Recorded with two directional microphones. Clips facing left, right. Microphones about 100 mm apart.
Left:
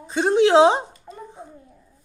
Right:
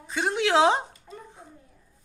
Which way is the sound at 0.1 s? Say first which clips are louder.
Left 8 dB; 25° left (ahead or behind).